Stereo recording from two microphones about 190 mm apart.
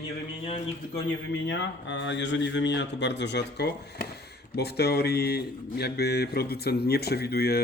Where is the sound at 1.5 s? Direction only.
70° left (ahead or behind).